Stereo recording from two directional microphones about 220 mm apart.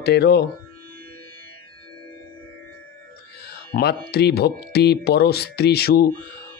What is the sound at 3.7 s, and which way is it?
Speech, 45° left (ahead or behind).